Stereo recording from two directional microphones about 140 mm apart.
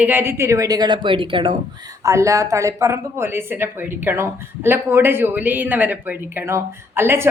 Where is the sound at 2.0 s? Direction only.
20° right (ahead or behind).